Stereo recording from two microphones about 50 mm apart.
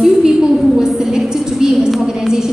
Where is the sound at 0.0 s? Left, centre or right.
Centre.